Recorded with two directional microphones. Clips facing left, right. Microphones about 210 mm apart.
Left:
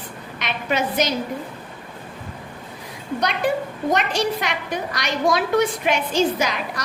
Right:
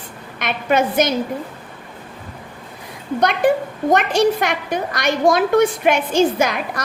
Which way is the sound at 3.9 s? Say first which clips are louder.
Right 6 dB; 50° right (ahead or behind).